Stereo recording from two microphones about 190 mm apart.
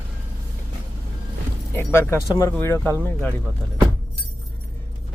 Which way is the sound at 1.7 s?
15° left (ahead or behind).